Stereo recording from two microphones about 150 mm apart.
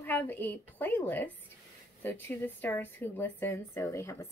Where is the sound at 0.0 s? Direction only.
15° left (ahead or behind).